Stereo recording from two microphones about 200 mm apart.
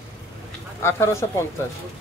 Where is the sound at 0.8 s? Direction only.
15° left (ahead or behind).